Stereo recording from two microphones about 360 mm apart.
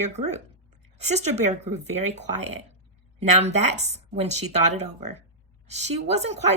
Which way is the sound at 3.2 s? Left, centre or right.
Centre.